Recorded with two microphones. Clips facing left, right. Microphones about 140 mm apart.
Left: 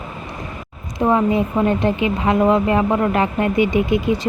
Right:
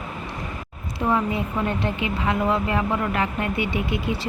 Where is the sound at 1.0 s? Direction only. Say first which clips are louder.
Left 6 dB; 35° left (ahead or behind).